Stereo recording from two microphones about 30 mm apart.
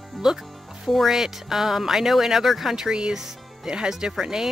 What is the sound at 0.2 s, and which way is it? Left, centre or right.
Speech, centre.